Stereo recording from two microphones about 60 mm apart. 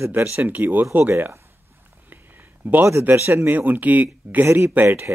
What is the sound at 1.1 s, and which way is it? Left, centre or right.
Speech, right.